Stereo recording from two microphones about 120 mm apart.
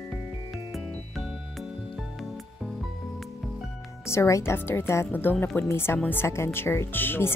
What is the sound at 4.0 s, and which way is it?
Speech, 20° left (ahead or behind).